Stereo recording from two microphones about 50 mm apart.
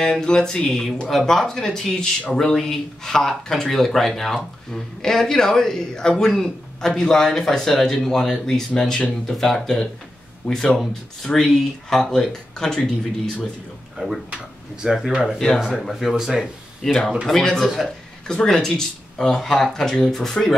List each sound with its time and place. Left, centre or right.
0.0 s speech: centre
13.9 s speech: centre
14.3 s speech: centre
15.2 s speech: centre
15.8 s speech: centre
16.8 s speech: centre
17.7 s a sound: centre
18.3 s speech: centre